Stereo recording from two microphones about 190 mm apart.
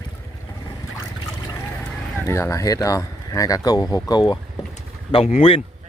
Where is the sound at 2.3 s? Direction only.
15° left (ahead or behind).